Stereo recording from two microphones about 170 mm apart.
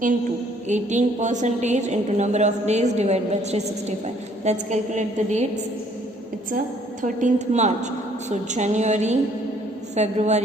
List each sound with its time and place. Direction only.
0.7 s a woman's voice: 45° right (ahead or behind)
7.0 s a woman's voice: 50° right (ahead or behind)